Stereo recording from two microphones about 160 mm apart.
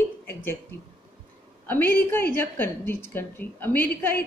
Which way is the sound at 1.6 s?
10° left (ahead or behind).